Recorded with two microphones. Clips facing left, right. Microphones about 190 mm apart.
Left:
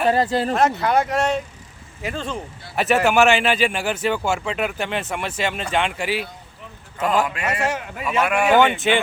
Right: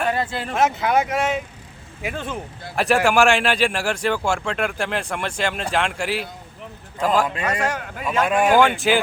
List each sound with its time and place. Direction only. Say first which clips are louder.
0.1 s speech: left 6 dB; 35° left (ahead or behind)
0.5 s a man's voice: right 2 dB; centre (ahead or behind)